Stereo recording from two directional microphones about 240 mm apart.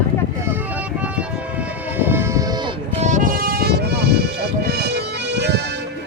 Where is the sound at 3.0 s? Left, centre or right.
Right.